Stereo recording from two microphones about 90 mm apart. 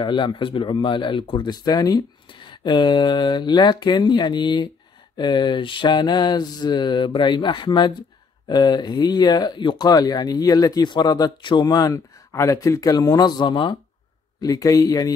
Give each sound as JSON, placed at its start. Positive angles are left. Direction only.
{"t": 0.0, "sound": "speech", "side_deg": 60}
{"t": 9.8, "sound": "speech", "side_deg": 45}
{"t": 12.3, "sound": "speech", "side_deg": 35}
{"t": 14.4, "sound": "speech", "side_deg": 40}